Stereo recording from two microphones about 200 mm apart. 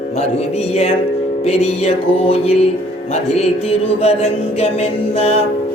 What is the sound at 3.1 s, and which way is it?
Mantra, 30° left (ahead or behind).